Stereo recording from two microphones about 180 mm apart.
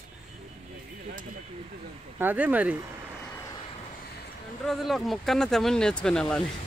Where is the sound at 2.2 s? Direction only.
10° right (ahead or behind).